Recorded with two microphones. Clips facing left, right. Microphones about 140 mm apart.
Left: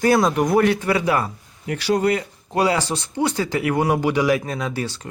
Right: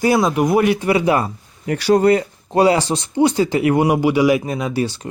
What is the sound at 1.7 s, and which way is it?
Speech, 45° right (ahead or behind).